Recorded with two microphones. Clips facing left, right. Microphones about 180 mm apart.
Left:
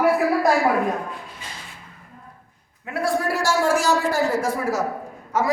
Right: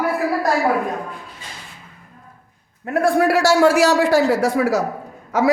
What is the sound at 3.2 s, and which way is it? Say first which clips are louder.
A man's voice: right 11 dB; 70° right (ahead or behind).